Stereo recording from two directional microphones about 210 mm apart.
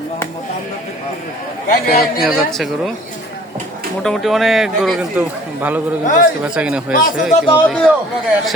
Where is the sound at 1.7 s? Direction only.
45° left (ahead or behind).